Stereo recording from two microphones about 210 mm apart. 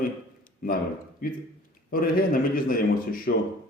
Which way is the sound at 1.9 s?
40° left (ahead or behind).